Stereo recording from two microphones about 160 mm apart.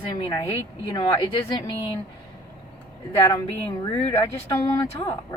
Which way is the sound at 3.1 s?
20° left (ahead or behind).